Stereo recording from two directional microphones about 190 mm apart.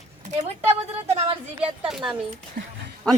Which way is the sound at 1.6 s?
5° right (ahead or behind).